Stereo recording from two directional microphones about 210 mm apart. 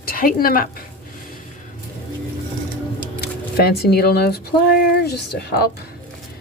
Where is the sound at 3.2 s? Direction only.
50° left (ahead or behind).